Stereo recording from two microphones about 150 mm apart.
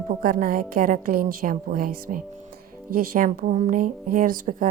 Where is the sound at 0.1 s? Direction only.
65° right (ahead or behind).